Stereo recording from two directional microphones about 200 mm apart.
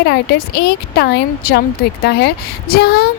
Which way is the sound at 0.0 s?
55° left (ahead or behind).